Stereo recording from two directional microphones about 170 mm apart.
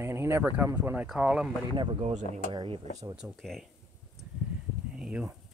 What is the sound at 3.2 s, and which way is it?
Speech, centre (ahead or behind).